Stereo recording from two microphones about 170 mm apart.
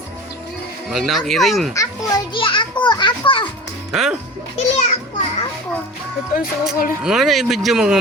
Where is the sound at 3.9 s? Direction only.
Centre (ahead or behind).